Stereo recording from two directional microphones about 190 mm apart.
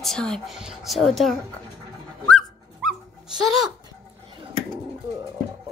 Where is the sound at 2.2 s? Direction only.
Centre (ahead or behind).